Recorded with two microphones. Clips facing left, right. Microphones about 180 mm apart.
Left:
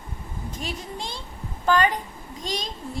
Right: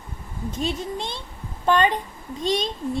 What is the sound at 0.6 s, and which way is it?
A woman's voice, 25° right (ahead or behind).